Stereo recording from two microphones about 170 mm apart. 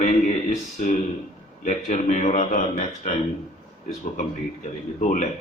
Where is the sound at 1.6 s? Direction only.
45° left (ahead or behind).